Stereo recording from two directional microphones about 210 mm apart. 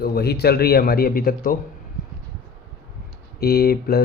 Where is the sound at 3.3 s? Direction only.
45° left (ahead or behind).